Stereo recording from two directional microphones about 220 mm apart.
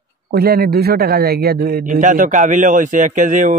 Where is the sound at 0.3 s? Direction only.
45° right (ahead or behind).